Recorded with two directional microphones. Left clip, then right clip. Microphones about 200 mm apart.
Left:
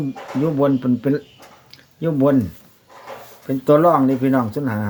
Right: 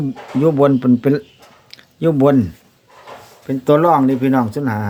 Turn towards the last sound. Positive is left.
turn(degrees=-20)  # may be behind; listen again after turning